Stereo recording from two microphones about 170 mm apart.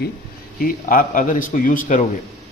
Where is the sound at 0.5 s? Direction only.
55° left (ahead or behind).